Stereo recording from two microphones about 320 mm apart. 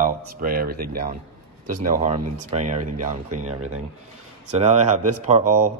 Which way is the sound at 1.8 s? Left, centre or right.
Right.